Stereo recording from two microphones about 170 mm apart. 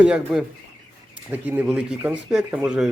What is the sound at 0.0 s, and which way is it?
Speech, 5° right (ahead or behind).